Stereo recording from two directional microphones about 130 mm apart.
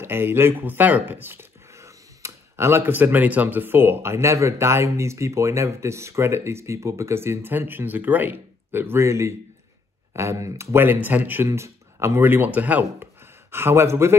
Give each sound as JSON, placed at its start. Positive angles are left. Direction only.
{"t": 0.0, "sound": "speech", "side_deg": -15}